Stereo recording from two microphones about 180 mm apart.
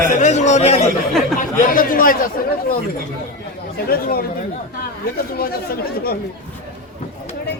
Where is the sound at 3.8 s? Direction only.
55° left (ahead or behind).